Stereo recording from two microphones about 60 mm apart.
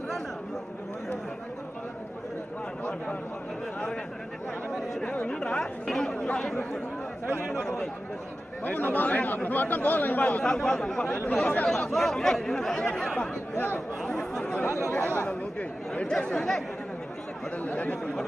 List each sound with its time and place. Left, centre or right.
2.8 s a sound: left
5.0 s chatter: centre
8.6 s speech: left
10.4 s speech: centre
11.9 s speech: centre
14.0 s chatter: centre
14.7 s speech: left
15.9 s speech: centre
17.6 s speech: left